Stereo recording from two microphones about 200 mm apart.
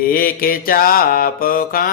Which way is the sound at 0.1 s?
45° left (ahead or behind).